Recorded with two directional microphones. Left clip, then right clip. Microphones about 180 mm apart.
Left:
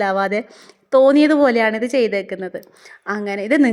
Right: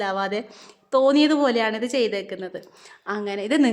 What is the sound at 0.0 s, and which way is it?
A woman's voice, 30° left (ahead or behind).